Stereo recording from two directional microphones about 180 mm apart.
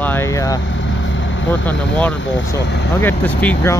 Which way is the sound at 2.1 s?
90° left.